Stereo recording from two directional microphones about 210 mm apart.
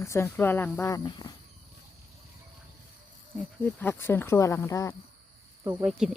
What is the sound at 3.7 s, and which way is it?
Speech, 10° left (ahead or behind).